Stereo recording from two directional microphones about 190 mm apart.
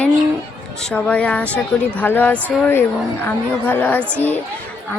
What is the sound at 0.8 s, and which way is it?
A woman's voice, 5° left (ahead or behind).